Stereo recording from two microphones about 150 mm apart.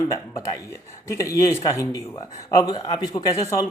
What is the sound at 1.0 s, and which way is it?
Speech, 20° left (ahead or behind).